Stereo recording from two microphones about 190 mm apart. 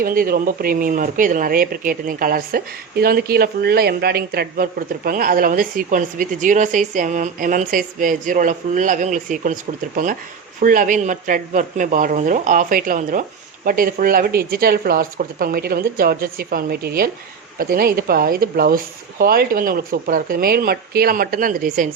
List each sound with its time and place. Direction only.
0.0 s speech: 50° right (ahead or behind)